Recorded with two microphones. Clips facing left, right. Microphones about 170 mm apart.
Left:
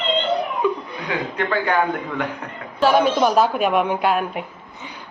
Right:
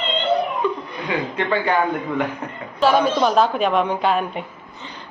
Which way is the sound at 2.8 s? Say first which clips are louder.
Left 1 dB; 5° left (ahead or behind).